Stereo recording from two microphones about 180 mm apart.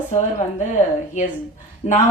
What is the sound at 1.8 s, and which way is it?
Speech, 35° left (ahead or behind).